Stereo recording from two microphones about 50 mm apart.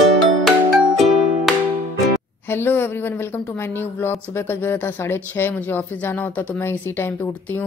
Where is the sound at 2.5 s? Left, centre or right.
Left.